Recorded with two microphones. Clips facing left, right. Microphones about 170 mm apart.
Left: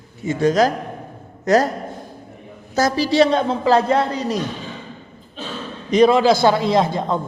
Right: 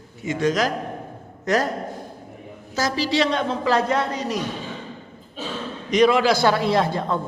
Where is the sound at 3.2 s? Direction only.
35° left (ahead or behind).